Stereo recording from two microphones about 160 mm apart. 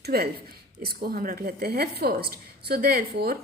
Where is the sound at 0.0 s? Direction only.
75° right (ahead or behind).